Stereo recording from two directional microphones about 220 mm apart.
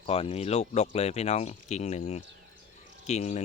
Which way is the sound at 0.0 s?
25° left (ahead or behind).